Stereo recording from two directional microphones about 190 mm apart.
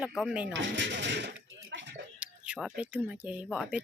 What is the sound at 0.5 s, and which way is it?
Speech, 70° right (ahead or behind).